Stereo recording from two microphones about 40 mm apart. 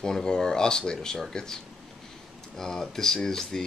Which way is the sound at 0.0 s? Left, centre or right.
Centre.